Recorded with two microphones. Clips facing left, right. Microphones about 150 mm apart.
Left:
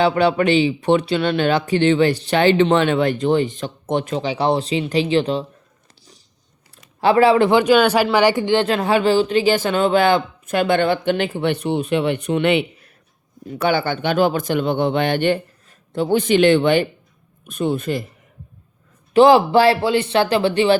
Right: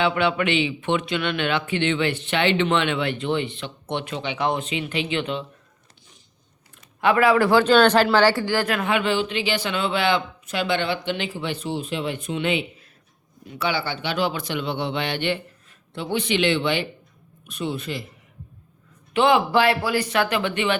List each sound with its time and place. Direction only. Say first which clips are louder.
0.0 s speech: left 5 dB; 40° left (ahead or behind)
7.0 s a man's voice: left 4 dB; 30° left (ahead or behind); by 12.9 s 65° left (ahead or behind)
13.5 s speech: left 7 dB; 50° left (ahead or behind)
19.1 s speech: left 7 dB; 40° left (ahead or behind)